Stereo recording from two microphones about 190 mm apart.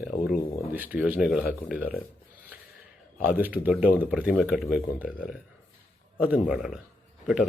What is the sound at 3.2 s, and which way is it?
Speech, 10° right (ahead or behind).